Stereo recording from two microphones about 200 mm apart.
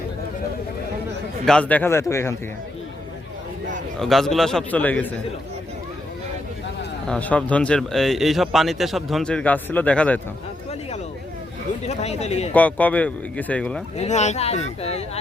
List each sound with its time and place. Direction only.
1.5 s speech: 5° left (ahead or behind)
4.0 s a man's voice: centre (ahead or behind)
7.1 s a man's voice: 5° left (ahead or behind)
11.9 s speech: 35° left (ahead or behind)
12.5 s speech: 10° left (ahead or behind)
13.9 s speech: 35° left (ahead or behind)